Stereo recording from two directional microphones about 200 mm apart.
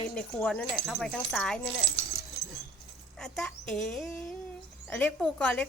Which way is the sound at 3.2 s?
5° left (ahead or behind).